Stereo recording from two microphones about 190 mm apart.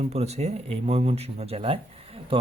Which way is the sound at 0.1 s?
35° right (ahead or behind).